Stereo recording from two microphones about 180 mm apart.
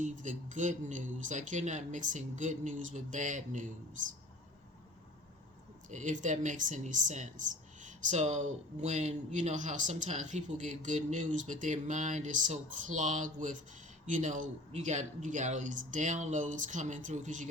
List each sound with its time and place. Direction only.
0.0 s speech: 45° right (ahead or behind)
5.9 s speech: 45° right (ahead or behind)